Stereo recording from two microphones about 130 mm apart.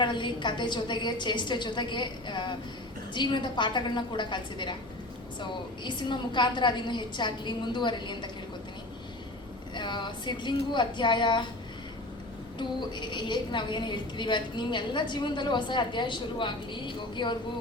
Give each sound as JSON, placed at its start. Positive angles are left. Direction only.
{"t": 0.0, "sound": "a woman's voice", "side_deg": 40}
{"t": 9.7, "sound": "a woman's voice", "side_deg": 35}
{"t": 12.5, "sound": "a woman's voice", "side_deg": 35}